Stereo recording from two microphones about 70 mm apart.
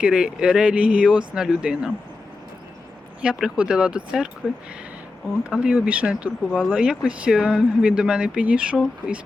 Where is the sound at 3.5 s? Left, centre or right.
Centre.